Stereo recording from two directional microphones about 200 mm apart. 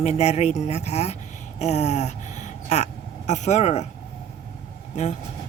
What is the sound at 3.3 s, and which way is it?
Speech, 35° left (ahead or behind).